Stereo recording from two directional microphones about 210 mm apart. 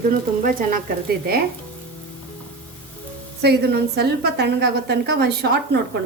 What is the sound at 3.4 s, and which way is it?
A woman's voice, 50° right (ahead or behind).